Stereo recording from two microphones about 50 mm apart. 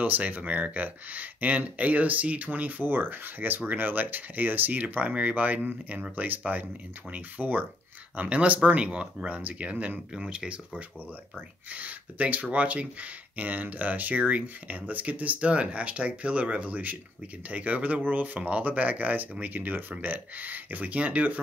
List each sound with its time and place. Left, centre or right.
0.0 s speech: right
8.2 s speech: right
10.1 s speech: centre
11.3 s speech: right